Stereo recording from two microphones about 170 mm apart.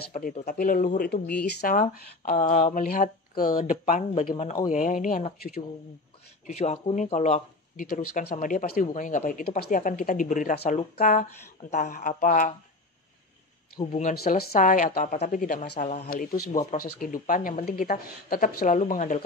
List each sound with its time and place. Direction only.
0.1 s speech: 50° left (ahead or behind); by 1.8 s 70° left (ahead or behind)
1.8 s speech: 50° left (ahead or behind)
6.4 s speech: 40° left (ahead or behind)
14.1 s speech: 65° left (ahead or behind)
14.5 s speech: 50° left (ahead or behind)
15.8 s speech: 50° left (ahead or behind)